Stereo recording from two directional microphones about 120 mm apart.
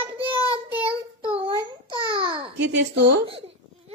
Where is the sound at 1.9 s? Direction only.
40° right (ahead or behind).